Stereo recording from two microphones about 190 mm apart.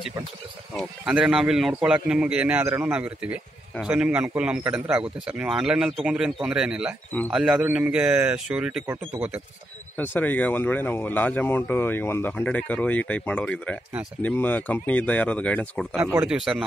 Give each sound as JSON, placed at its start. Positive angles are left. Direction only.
{"t": 0.7, "sound": "a man's voice", "side_deg": -5}
{"t": 9.9, "sound": "speech", "side_deg": 10}
{"t": 16.0, "sound": "a man's voice", "side_deg": -10}